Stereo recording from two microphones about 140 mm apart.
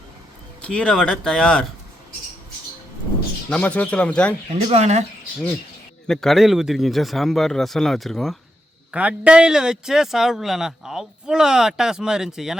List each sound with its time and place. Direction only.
0.6 s speech: 10° left (ahead or behind)
3.5 s speech: 10° left (ahead or behind)
4.5 s speech: 50° right (ahead or behind)
6.1 s a man's voice: 5° left (ahead or behind)
8.9 s a man's voice: 10° right (ahead or behind)